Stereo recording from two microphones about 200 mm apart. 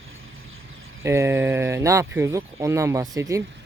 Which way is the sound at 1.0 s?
15° right (ahead or behind).